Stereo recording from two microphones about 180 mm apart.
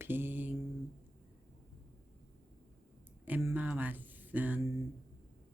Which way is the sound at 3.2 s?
10° right (ahead or behind).